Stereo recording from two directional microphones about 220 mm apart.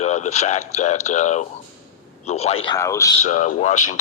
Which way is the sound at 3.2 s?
30° left (ahead or behind).